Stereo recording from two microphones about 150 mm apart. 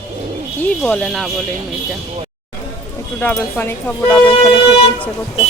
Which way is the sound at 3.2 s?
15° left (ahead or behind).